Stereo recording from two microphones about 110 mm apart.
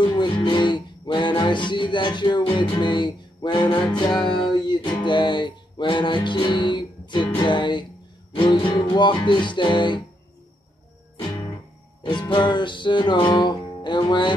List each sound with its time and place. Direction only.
0.0 s music: 45° left (ahead or behind)
12.0 s music: 45° left (ahead or behind)